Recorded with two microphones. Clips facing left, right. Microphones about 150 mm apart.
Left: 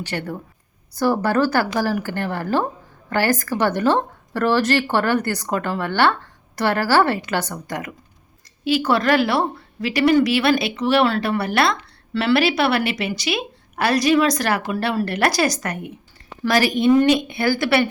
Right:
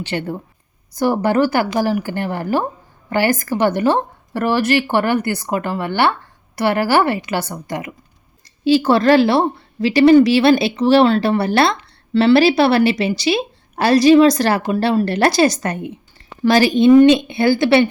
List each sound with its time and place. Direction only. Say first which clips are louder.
0.1 s a woman's voice: right 4 dB; 20° right (ahead or behind)
8.6 s a woman's voice: right 6 dB; 30° right (ahead or behind)